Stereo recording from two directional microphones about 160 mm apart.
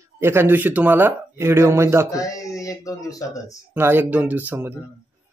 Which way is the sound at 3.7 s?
15° right (ahead or behind).